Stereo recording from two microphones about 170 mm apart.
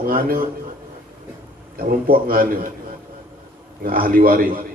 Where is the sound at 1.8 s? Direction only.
55° right (ahead or behind).